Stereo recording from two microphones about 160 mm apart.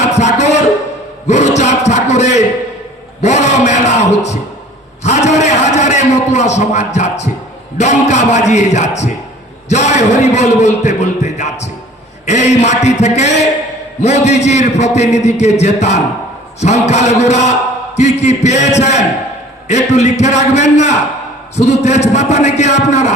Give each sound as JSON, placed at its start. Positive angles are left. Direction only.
{"t": 0.0, "sound": "music", "side_deg": 45}
{"t": 1.3, "sound": "a sound", "side_deg": 45}
{"t": 7.8, "sound": "a man's voice", "side_deg": 45}